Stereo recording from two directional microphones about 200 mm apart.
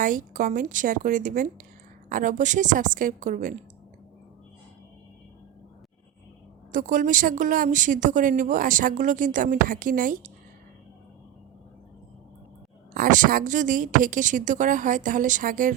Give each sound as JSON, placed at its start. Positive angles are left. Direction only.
{"t": 0.0, "sound": "speech", "side_deg": -40}
{"t": 6.7, "sound": "speech", "side_deg": -40}
{"t": 12.9, "sound": "speech", "side_deg": -40}